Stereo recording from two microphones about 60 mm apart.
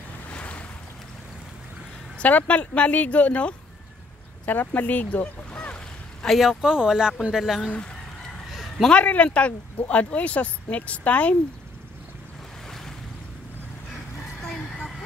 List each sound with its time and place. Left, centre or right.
0.3 s waves: left
2.1 s speech: left
6.2 s speech: centre
6.6 s speech: centre
8.5 s a sound: centre
8.8 s speech: left
12.6 s waves: centre